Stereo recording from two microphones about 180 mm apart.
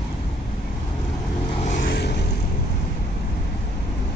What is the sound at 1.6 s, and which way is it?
Vehicle, 50° left (ahead or behind).